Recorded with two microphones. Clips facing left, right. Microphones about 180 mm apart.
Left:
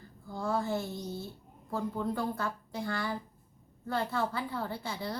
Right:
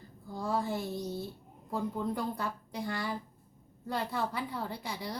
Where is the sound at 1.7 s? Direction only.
15° right (ahead or behind).